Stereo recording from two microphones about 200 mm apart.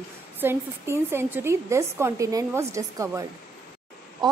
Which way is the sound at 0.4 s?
10° right (ahead or behind).